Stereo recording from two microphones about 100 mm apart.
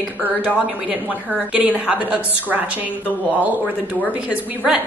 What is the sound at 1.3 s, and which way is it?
Speech, 10° right (ahead or behind).